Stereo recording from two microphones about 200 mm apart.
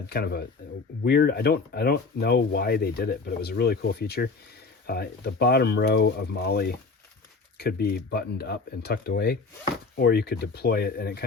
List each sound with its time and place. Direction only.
0.1 s speech: 55° left (ahead or behind)